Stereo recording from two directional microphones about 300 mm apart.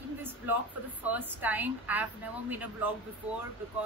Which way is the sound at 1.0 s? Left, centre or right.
Centre.